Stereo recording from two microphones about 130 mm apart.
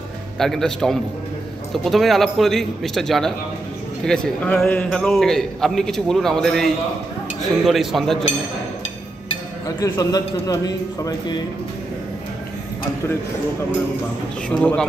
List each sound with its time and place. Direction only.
0.4 s a man's voice: 5° left (ahead or behind)
9.8 s a man's voice: 25° left (ahead or behind)
14.5 s speech: 10° left (ahead or behind)